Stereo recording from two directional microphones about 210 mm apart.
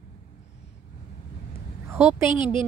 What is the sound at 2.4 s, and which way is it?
Speech, 20° left (ahead or behind).